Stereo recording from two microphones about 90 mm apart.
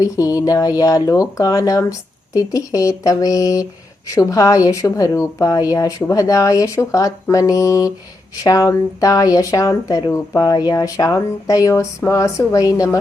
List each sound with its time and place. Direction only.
0.0 s speech: 40° left (ahead or behind)